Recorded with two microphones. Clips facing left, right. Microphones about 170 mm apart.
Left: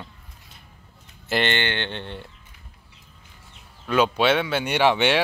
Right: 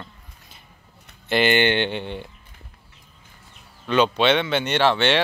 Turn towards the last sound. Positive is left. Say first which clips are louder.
# even
turn(degrees=15)  # may be behind; listen again after turning